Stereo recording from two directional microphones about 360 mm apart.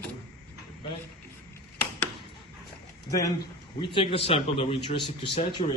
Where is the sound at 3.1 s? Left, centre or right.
Centre.